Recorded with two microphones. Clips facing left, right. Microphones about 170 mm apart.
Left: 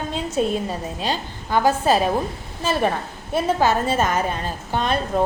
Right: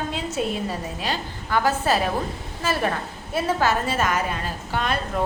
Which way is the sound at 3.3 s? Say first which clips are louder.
Left 3 dB; 20° left (ahead or behind).